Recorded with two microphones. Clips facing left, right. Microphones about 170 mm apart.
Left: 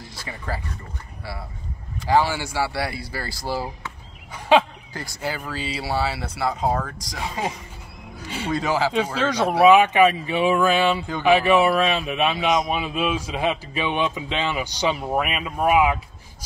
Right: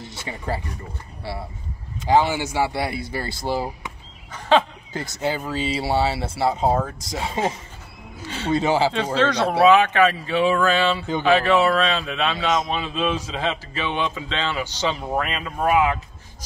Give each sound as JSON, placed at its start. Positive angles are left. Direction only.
{"t": 0.0, "sound": "speech", "side_deg": -25}
{"t": 2.0, "sound": "speech", "side_deg": -20}
{"t": 4.3, "sound": "a sound", "side_deg": 10}
{"t": 4.9, "sound": "speech", "side_deg": -20}
{"t": 8.5, "sound": "speech", "side_deg": -25}
{"t": 8.9, "sound": "a man's voice", "side_deg": 10}